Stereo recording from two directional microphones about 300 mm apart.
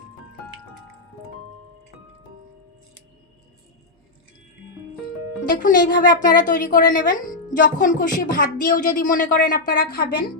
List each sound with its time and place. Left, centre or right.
5.4 s speech: left